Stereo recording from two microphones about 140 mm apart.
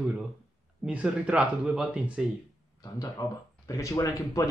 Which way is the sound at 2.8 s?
25° left (ahead or behind).